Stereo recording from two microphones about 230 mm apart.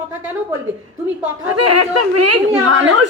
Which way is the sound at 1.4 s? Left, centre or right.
Right.